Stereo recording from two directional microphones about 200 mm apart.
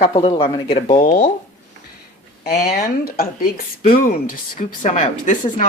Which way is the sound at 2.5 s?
50° left (ahead or behind).